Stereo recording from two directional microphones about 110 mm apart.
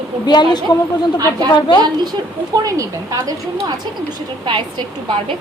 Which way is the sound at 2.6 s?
30° right (ahead or behind).